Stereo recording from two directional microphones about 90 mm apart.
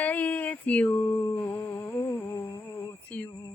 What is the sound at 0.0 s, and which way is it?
Mantra, 15° left (ahead or behind).